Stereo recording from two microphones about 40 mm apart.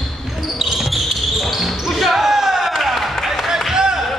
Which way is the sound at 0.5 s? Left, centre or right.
Centre.